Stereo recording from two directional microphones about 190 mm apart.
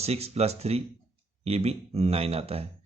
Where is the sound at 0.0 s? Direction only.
35° right (ahead or behind).